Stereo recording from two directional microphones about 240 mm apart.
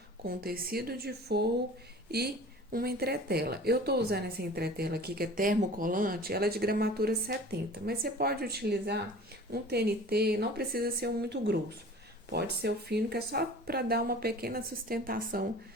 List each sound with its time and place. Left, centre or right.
0.3 s speech: right